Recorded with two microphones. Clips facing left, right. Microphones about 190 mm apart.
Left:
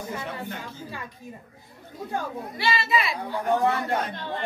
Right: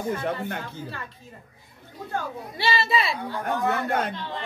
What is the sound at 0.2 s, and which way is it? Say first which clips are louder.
Speech: right 5 dB; 60° right (ahead or behind).